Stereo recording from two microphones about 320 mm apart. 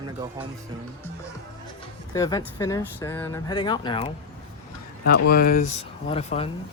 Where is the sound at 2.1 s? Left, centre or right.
Centre.